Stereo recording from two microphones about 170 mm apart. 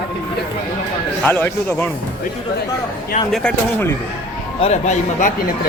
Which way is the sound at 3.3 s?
Centre (ahead or behind).